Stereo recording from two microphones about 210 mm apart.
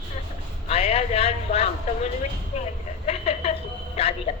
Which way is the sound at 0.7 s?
30° left (ahead or behind).